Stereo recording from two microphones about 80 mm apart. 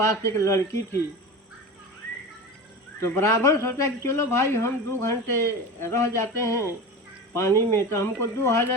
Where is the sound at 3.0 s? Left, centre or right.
Left.